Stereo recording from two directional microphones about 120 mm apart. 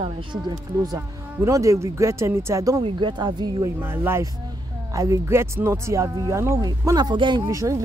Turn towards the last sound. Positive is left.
turn(degrees=-25)  # may be behind; listen again after turning